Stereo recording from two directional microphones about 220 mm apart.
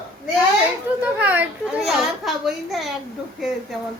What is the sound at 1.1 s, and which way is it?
A child's voice, 5° right (ahead or behind).